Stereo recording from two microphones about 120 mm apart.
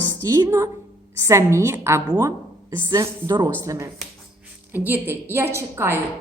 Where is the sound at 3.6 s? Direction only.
25° right (ahead or behind).